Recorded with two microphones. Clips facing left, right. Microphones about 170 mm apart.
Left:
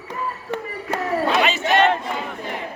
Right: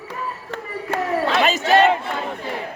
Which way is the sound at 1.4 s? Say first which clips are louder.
Right 2 dB; 40° right (ahead or behind).